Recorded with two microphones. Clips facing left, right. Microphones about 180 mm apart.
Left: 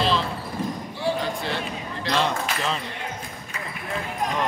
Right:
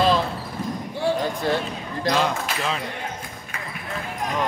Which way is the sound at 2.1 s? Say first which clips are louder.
Right 1 dB; 5° right (ahead or behind).